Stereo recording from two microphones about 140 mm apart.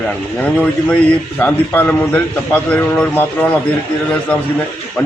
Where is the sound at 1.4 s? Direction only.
10° left (ahead or behind).